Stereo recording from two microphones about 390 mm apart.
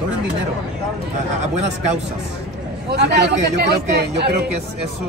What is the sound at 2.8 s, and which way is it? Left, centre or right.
Speech, right.